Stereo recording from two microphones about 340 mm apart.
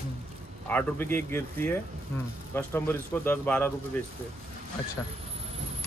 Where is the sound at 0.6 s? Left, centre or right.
Centre.